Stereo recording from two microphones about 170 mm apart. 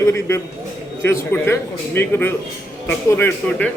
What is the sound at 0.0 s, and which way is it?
A man's voice, 15° left (ahead or behind).